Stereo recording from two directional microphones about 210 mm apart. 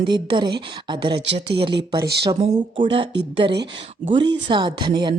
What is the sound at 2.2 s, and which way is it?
A woman's voice, 25° right (ahead or behind).